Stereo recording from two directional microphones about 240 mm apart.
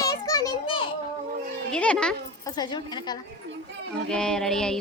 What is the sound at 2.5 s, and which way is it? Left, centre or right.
Speech, centre.